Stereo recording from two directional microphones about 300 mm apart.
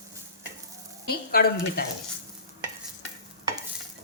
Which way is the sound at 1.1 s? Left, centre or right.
Left.